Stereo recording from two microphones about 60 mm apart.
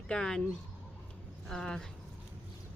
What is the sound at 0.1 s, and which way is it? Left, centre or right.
Speech, centre.